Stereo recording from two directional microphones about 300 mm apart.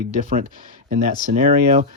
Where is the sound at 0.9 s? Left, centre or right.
Right.